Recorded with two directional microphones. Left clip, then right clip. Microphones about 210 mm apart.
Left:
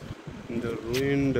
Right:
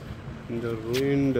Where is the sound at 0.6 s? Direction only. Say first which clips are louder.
Right 1 dB; 10° right (ahead or behind).